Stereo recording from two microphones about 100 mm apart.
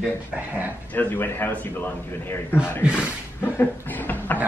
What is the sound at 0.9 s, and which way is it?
Speech, 20° left (ahead or behind).